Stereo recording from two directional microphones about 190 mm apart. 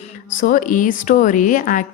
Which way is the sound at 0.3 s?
45° left (ahead or behind).